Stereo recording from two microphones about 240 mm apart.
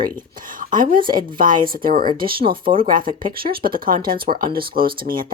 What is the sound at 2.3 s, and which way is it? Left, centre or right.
Speech, right.